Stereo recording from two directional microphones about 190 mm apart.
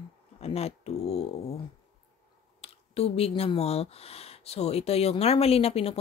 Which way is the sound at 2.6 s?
30° left (ahead or behind).